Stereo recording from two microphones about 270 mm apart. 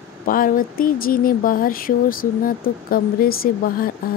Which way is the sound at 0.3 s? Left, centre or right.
Left.